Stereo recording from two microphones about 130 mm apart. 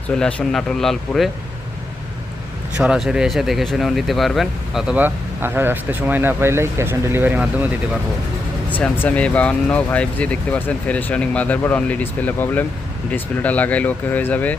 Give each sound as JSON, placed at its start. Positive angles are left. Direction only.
{"t": 0.2, "sound": "speech", "side_deg": 5}
{"t": 2.7, "sound": "speech", "side_deg": -5}
{"t": 4.9, "sound": "speech", "side_deg": -15}
{"t": 8.8, "sound": "speech", "side_deg": 10}